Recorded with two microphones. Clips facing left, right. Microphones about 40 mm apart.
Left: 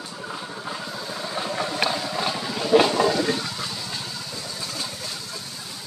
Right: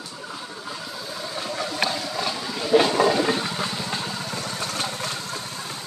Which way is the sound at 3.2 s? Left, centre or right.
Right.